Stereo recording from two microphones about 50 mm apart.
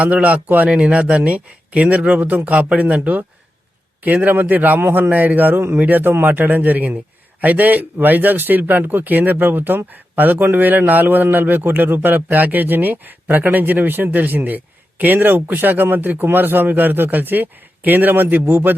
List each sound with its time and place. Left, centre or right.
0.0 s a man's voice: right
5.0 s a man's voice: right